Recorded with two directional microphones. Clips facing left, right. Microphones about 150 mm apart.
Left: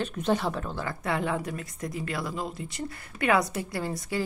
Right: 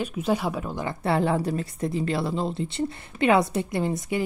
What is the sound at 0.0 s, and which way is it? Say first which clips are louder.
Speech: right 2 dB; 5° right (ahead or behind).